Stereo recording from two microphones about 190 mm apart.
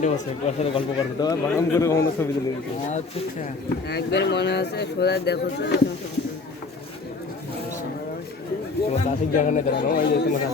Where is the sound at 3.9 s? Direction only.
60° left (ahead or behind).